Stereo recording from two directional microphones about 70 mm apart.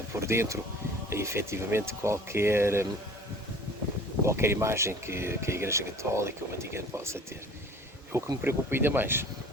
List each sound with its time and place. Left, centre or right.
0.2 s speech: right
4.3 s speech: right